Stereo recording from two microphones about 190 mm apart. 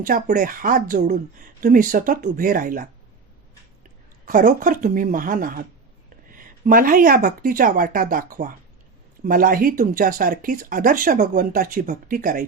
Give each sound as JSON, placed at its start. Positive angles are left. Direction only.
{"t": 0.0, "sound": "speech", "side_deg": -45}
{"t": 4.3, "sound": "speech", "side_deg": -45}